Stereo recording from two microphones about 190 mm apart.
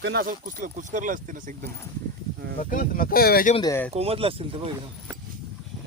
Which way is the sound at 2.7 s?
45° left (ahead or behind).